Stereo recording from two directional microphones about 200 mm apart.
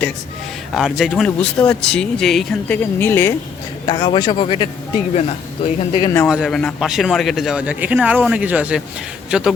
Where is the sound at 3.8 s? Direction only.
20° left (ahead or behind).